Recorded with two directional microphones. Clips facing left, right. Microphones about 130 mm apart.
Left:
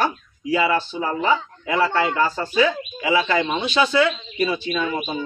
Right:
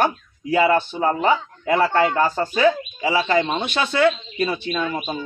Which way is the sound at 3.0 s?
35° right (ahead or behind).